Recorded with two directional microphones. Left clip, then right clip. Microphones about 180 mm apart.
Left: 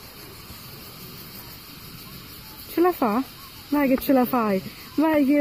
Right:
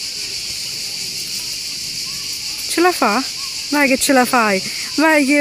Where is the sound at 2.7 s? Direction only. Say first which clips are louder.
Right 6 dB; 5° right (ahead or behind).